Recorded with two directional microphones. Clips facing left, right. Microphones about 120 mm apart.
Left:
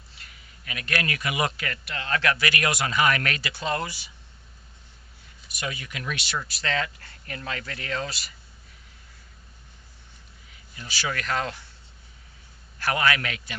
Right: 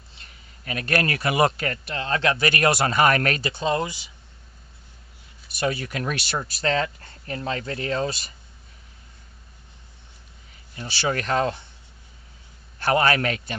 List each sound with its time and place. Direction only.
0.6 s speech: 40° right (ahead or behind)
3.4 s speech: 25° right (ahead or behind)
5.5 s speech: 35° right (ahead or behind)
10.8 s speech: 30° right (ahead or behind)
12.8 s speech: 35° right (ahead or behind)